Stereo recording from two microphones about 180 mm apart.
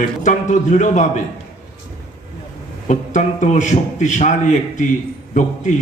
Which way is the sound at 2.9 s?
45° left (ahead or behind).